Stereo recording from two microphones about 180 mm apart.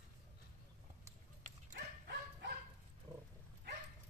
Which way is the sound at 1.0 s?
45° right (ahead or behind).